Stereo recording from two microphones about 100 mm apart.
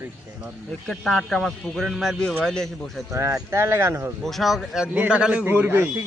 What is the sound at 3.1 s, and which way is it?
Speech, 30° right (ahead or behind).